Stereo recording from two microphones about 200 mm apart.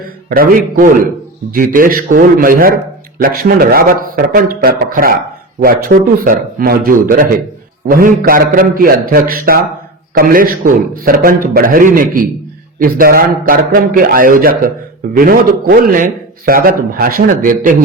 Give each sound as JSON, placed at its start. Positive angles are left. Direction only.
{"t": 0.3, "sound": "a man's voice", "side_deg": -45}